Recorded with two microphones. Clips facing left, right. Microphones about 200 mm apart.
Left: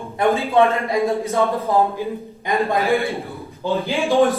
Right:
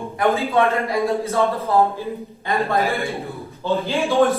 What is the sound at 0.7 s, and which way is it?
Speech, 15° left (ahead or behind).